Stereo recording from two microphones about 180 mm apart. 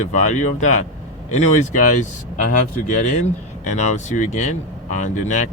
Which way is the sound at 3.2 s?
40° left (ahead or behind).